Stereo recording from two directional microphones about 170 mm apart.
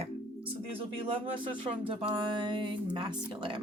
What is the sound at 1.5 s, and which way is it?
A woman's voice, 30° right (ahead or behind).